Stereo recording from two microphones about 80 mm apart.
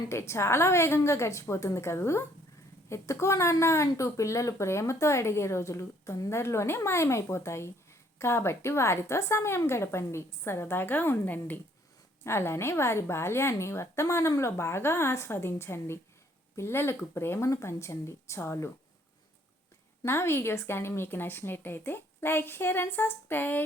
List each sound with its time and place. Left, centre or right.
0.1 s speech: left
20.1 s a woman's voice: left